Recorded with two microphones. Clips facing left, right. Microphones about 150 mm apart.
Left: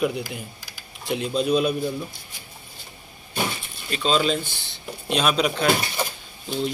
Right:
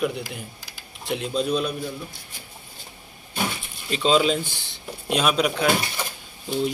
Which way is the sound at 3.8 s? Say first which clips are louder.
Right 2 dB; 20° right (ahead or behind).